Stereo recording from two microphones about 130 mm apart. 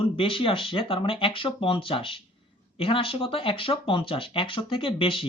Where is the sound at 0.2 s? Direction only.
40° left (ahead or behind).